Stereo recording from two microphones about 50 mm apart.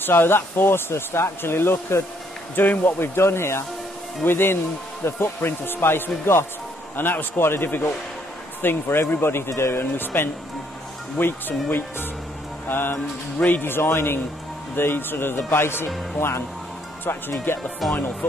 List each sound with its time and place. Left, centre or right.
0.0 s speech: left
2.5 s speech: left
3.2 s speech: left
12.6 s speech: left
17.5 s speech: left